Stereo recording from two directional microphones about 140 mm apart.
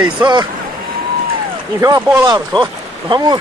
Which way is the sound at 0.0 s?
30° right (ahead or behind).